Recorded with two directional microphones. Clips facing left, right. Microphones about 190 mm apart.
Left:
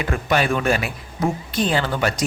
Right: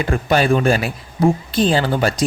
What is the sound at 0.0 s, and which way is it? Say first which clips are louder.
A man's voice: right 4 dB; 35° right (ahead or behind).